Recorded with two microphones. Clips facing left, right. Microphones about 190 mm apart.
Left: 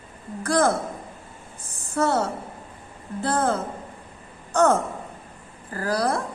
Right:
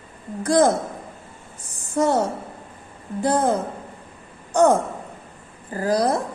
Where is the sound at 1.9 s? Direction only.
15° right (ahead or behind).